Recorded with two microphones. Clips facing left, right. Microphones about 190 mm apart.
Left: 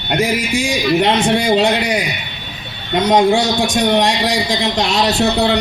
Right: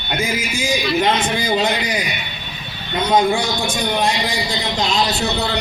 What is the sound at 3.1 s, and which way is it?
Speech, 75° left (ahead or behind).